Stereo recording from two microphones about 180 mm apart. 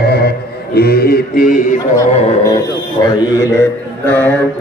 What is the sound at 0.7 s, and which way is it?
Mantra, 60° left (ahead or behind).